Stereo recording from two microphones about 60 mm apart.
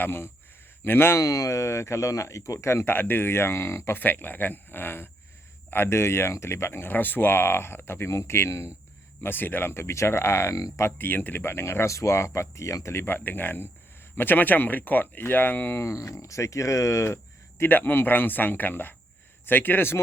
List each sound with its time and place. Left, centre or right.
0.0 s speech: left
1.2 s speech: left
9.2 s speech: left
10.9 s speech: left
13.1 s speech: left
17.6 s speech: left